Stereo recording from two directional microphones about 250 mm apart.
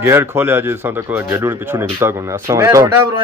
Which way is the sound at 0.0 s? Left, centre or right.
Centre.